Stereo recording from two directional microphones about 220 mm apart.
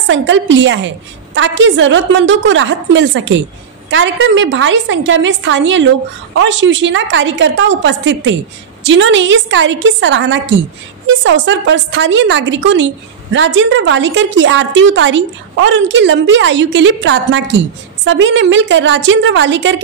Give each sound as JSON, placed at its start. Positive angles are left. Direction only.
{"t": 0.0, "sound": "a woman's voice", "side_deg": -55}